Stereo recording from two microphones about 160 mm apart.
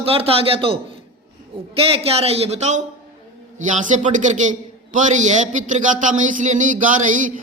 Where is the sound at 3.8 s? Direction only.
50° right (ahead or behind).